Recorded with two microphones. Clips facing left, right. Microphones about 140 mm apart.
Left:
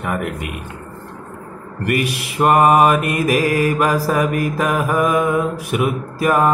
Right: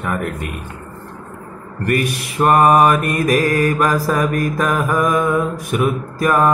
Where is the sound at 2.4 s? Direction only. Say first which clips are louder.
Even; 10° left (ahead or behind).